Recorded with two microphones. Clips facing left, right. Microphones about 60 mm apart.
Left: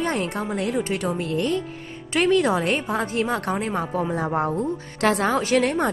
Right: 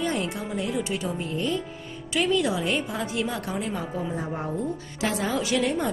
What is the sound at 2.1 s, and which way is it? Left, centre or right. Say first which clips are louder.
A woman's voice: left 5 dB; left.